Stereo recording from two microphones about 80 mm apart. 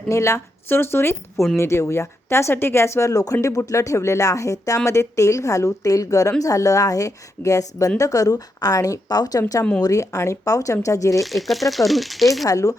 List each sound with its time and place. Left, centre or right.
0.1 s a woman's voice: left
9.8 s a woman's voice: left
11.2 s speech: centre
12.5 s speech: left